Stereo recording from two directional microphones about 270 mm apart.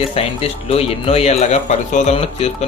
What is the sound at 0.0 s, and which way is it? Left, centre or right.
Speech, left.